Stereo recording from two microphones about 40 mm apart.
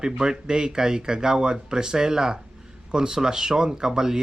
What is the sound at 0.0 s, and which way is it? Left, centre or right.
Speech, centre.